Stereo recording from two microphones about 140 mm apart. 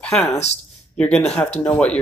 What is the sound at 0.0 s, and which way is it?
Speech, 10° left (ahead or behind).